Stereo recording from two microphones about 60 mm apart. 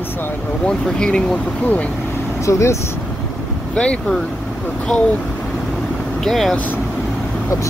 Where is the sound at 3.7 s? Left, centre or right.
Centre.